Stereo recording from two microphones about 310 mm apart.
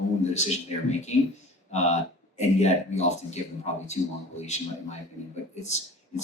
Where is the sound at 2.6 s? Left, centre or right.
Left.